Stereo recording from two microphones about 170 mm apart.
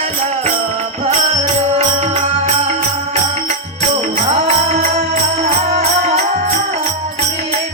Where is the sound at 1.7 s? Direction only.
35° right (ahead or behind).